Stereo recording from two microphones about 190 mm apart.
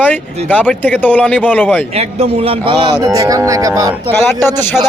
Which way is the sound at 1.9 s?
30° right (ahead or behind).